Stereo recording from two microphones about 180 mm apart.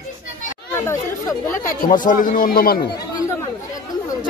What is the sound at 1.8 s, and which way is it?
A man's voice, 50° left (ahead or behind).